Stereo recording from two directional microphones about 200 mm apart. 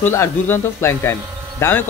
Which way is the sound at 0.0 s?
10° left (ahead or behind).